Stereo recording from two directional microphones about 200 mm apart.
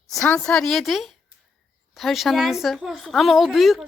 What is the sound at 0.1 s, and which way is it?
Speech, 5° left (ahead or behind).